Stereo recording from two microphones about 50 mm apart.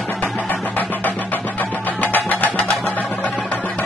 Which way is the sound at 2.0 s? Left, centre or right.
Left.